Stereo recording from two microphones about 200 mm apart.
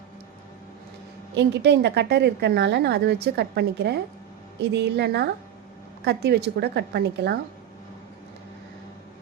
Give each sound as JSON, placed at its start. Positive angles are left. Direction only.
{"t": 1.4, "sound": "a woman's voice", "side_deg": -55}